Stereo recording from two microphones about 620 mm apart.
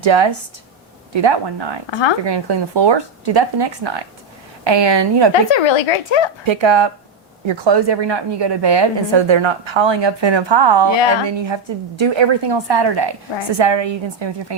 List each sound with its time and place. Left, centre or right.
0.0 s a woman's voice: right
5.3 s speech: left
6.4 s a woman's voice: right